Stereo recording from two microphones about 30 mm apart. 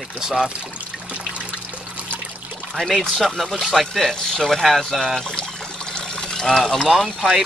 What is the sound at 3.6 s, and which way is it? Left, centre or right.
Speech, centre.